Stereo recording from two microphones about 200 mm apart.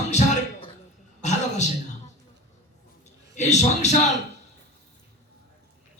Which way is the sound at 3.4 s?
35° left (ahead or behind).